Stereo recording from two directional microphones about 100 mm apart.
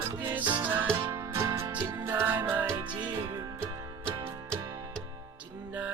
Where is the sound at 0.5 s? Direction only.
20° right (ahead or behind).